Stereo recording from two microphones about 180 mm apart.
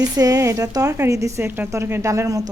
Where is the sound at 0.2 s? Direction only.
20° right (ahead or behind).